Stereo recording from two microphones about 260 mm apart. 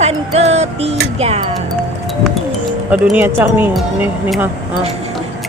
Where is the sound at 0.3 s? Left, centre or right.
Right.